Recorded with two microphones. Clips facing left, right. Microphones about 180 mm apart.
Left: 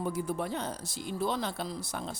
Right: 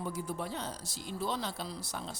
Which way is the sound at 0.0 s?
55° left (ahead or behind).